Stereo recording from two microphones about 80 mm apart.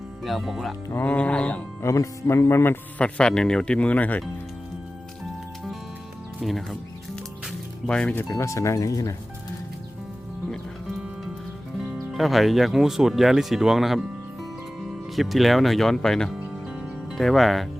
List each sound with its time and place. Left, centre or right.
0.2 s speech: centre
0.9 s speech: left
1.8 s speech: left
3.0 s speech: centre
6.4 s speech: centre
7.9 s speech: centre
8.3 s speech: left
12.1 s speech: centre
16.6 s music: centre